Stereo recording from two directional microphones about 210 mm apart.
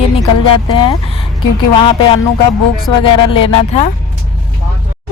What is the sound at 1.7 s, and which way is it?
Speech, 25° left (ahead or behind).